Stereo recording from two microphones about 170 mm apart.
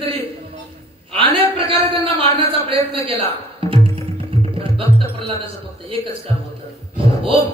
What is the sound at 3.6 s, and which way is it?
Music, 30° right (ahead or behind).